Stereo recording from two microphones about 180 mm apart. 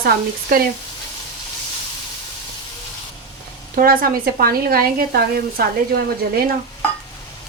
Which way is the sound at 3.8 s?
55° right (ahead or behind).